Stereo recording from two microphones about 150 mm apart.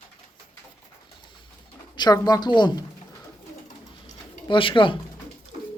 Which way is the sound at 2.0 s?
25° left (ahead or behind).